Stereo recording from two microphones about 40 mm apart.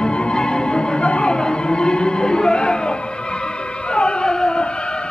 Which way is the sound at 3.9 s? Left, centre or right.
Left.